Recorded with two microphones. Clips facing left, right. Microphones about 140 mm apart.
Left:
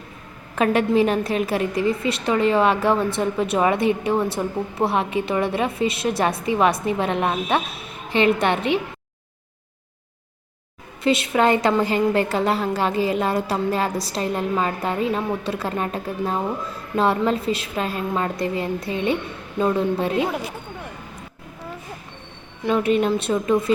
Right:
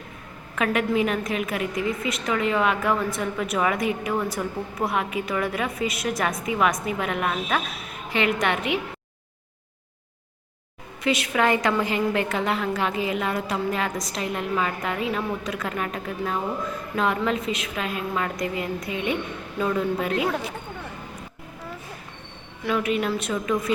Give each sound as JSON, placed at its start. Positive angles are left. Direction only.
{"t": 0.5, "sound": "a woman's voice", "side_deg": 30}
{"t": 11.0, "sound": "a woman's voice", "side_deg": 25}
{"t": 22.6, "sound": "a woman's voice", "side_deg": 30}